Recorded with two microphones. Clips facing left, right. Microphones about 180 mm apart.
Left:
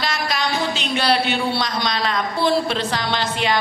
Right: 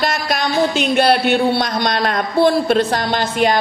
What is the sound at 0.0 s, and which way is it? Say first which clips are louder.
A man's voice: right 4 dB; 50° right (ahead or behind).